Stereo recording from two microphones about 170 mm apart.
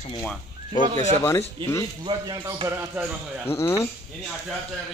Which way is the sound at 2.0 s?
25° right (ahead or behind).